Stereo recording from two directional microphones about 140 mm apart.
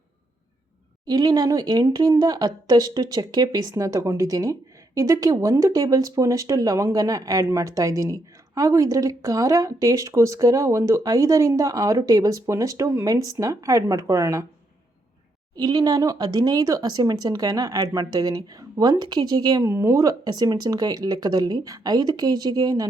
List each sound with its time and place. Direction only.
1.0 s speech: 30° right (ahead or behind)
15.5 s speech: 30° right (ahead or behind)